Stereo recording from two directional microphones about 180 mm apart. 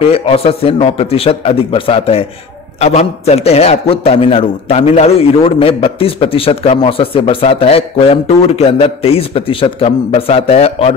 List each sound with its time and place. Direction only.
0.0 s a man's voice: 30° left (ahead or behind)